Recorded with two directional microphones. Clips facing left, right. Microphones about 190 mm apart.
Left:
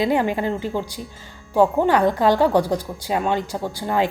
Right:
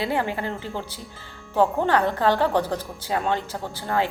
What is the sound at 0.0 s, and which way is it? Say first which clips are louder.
A woman's voice: left 6 dB; 15° left (ahead or behind).